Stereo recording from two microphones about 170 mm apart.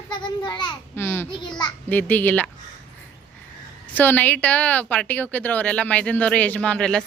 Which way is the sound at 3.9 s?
10° left (ahead or behind).